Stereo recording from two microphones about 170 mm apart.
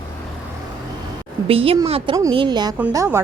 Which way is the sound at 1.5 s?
35° right (ahead or behind).